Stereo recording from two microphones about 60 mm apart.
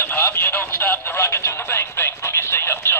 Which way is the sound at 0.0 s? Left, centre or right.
Left.